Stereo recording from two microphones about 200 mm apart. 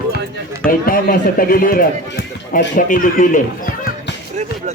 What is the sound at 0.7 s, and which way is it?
Speech, 45° left (ahead or behind).